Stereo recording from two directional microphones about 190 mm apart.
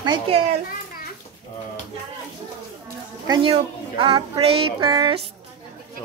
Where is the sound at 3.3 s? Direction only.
30° right (ahead or behind).